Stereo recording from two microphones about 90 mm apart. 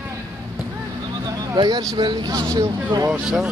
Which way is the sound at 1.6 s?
50° right (ahead or behind).